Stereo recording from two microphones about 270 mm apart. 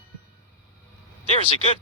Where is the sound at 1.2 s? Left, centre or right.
Left.